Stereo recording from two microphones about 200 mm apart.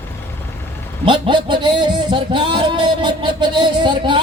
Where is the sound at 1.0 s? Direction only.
25° right (ahead or behind).